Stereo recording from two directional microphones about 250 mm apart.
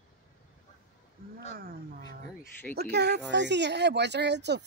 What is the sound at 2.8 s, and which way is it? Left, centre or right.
Speech, right.